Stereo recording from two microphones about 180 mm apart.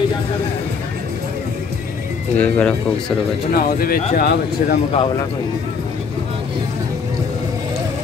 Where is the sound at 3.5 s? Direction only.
55° left (ahead or behind).